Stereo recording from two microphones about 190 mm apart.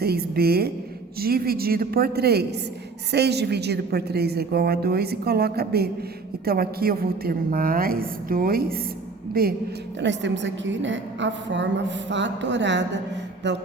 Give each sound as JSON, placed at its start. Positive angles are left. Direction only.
{"t": 0.0, "sound": "a woman's voice", "side_deg": -55}
{"t": 10.0, "sound": "a woman's voice", "side_deg": -70}